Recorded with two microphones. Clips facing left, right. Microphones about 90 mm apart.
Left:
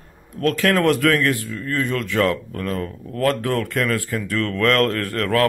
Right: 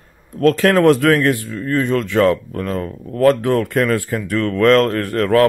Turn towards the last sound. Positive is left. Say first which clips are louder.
# right 6 dB
turn(degrees=-20)  # may be behind; listen again after turning